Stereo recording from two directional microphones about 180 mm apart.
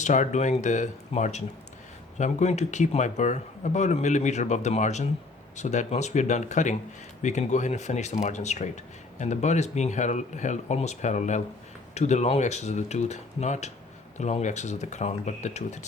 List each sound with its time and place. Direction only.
0.0 s speech: 40° left (ahead or behind)